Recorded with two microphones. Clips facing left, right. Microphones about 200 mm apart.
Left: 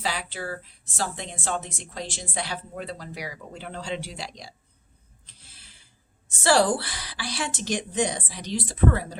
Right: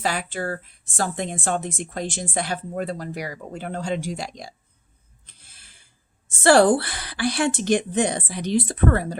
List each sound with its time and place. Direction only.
0.0 s a woman's voice: 50° right (ahead or behind)
5.2 s a sound: 50° right (ahead or behind)
6.3 s a woman's voice: 55° right (ahead or behind)